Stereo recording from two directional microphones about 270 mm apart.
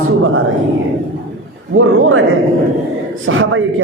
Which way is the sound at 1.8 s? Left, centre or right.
Right.